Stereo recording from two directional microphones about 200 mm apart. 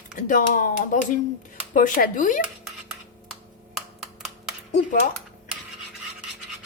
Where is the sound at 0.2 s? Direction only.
40° left (ahead or behind).